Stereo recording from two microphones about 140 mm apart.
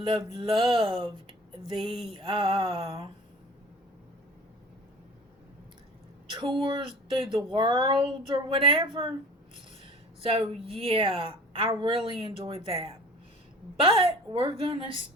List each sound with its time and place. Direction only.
0.0 s speech: 35° right (ahead or behind)
1.3 s a sound: 35° right (ahead or behind)
2.7 s speech: 35° right (ahead or behind)
6.4 s speech: 40° right (ahead or behind)
10.2 s a woman's voice: 45° right (ahead or behind)